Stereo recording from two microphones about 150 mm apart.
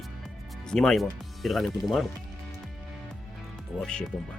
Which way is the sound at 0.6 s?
5° left (ahead or behind).